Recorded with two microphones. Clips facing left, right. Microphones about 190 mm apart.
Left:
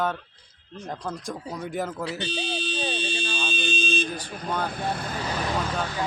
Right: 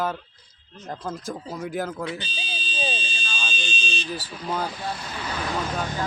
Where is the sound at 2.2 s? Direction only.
70° left (ahead or behind).